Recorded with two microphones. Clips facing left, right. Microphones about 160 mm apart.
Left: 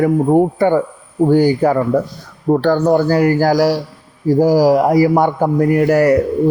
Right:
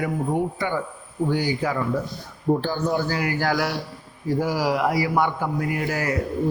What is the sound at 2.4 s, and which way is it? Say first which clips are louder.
Speech: left 9 dB; 70° left (ahead or behind).